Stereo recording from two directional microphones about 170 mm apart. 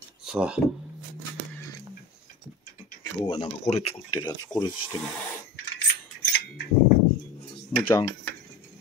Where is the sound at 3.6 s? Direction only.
35° left (ahead or behind).